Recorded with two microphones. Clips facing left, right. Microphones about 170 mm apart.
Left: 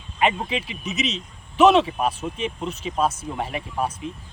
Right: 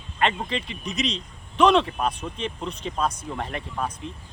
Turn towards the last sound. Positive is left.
turn(degrees=5)  # may be behind; listen again after turning